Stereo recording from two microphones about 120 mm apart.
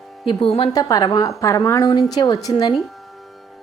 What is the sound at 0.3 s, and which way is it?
Speech, 45° left (ahead or behind).